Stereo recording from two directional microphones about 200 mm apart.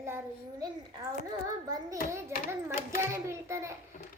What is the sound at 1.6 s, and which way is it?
Speech, 20° right (ahead or behind).